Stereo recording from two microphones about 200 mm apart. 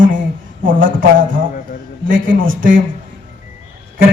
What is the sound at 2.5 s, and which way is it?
Speech, 45° right (ahead or behind).